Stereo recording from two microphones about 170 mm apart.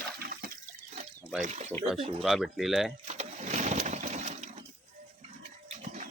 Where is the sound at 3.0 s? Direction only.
40° right (ahead or behind).